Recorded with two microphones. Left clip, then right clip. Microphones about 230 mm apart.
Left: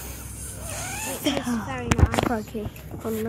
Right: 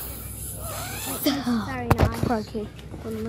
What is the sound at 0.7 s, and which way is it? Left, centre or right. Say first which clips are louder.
Cat: left 1 dB; centre.